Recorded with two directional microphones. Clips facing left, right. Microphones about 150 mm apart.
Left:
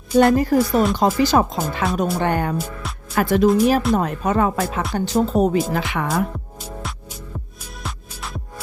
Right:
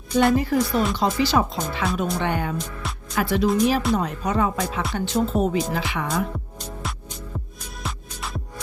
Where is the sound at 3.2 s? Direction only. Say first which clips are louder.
Left 5 dB; 50° left (ahead or behind).